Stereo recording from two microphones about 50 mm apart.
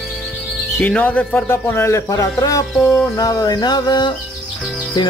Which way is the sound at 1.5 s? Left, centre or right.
Left.